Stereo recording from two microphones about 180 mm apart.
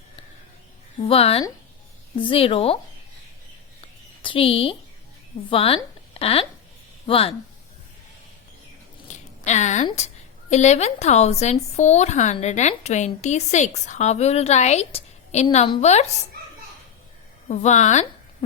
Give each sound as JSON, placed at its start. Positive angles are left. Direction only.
{"t": 1.0, "sound": "speech", "side_deg": 35}
{"t": 4.2, "sound": "a woman's voice", "side_deg": 30}
{"t": 9.4, "sound": "speech", "side_deg": 40}
{"t": 17.5, "sound": "speech", "side_deg": 40}